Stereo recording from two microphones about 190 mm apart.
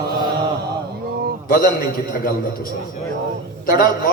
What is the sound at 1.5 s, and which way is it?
Speech, 50° left (ahead or behind).